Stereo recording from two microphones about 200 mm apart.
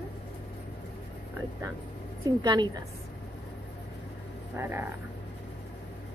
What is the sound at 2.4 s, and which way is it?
Speech, 20° right (ahead or behind).